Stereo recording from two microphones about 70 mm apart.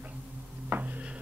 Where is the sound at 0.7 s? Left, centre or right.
Right.